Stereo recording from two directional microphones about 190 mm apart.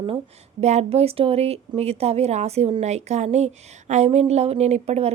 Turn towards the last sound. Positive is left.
turn(degrees=-35)  # may be behind; listen again after turning